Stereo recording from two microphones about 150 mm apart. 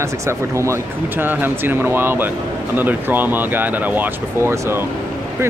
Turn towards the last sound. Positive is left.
turn(degrees=-20)  # may be behind; listen again after turning